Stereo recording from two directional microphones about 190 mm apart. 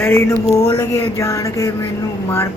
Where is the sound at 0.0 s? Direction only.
15° left (ahead or behind).